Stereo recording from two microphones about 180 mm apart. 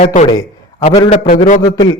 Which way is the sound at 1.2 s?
50° left (ahead or behind).